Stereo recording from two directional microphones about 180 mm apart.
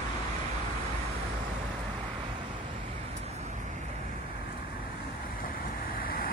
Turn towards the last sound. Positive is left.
turn(degrees=55)  # may be behind; listen again after turning